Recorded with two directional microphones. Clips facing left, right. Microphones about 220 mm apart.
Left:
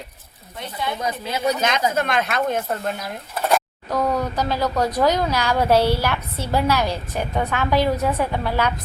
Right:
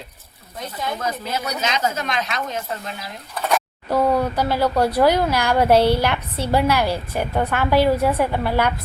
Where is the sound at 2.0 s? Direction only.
50° left (ahead or behind).